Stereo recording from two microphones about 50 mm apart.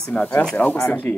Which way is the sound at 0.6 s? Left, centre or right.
Left.